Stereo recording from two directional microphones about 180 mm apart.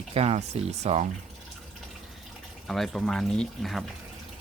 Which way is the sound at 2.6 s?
Centre (ahead or behind).